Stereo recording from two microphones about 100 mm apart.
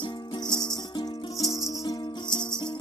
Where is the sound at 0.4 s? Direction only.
45° left (ahead or behind).